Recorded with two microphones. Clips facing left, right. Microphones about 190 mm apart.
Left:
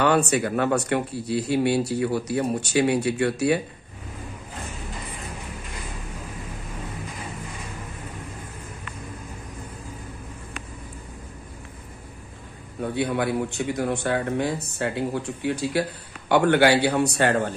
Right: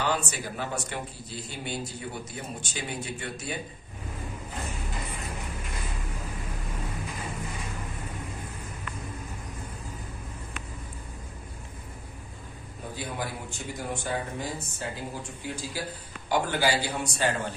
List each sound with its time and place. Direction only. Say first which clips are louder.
0.0 s speech: left 9 dB; 65° left (ahead or behind)
12.8 s a man's voice: left 11 dB; 70° left (ahead or behind)